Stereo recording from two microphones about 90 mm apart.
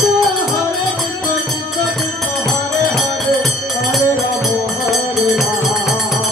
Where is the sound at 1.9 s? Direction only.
5° left (ahead or behind).